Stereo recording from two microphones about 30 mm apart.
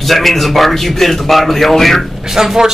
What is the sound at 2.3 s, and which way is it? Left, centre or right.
Speech, centre.